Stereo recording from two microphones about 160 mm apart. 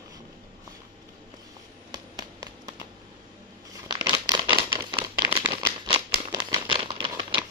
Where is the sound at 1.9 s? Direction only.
25° right (ahead or behind).